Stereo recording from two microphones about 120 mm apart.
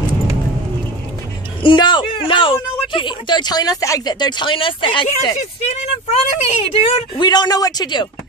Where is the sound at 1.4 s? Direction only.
40° left (ahead or behind).